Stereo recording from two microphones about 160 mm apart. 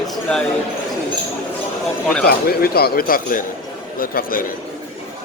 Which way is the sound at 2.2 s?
75° left (ahead or behind).